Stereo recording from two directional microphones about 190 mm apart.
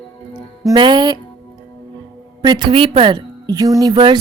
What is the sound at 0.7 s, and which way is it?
Speech, 25° right (ahead or behind).